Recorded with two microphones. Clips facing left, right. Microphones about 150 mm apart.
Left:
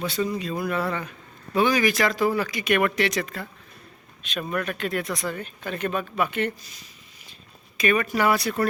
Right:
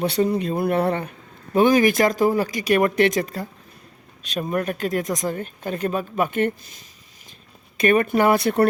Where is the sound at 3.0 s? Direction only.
45° right (ahead or behind).